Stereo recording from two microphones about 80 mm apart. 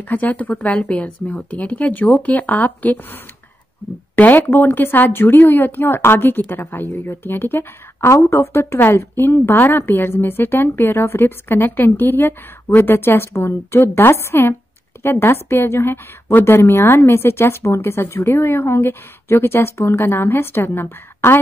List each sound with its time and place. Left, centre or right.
0.1 s a woman's voice: centre